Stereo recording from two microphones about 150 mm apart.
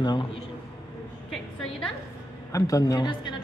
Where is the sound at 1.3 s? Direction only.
5° left (ahead or behind).